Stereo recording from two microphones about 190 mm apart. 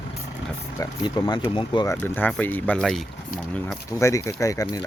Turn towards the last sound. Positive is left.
turn(degrees=15)  # may be behind; listen again after turning